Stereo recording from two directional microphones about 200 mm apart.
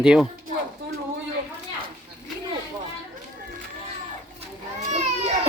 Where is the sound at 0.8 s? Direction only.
60° right (ahead or behind).